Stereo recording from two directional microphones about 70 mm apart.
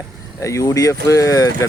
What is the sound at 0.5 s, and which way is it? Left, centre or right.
Speech, left.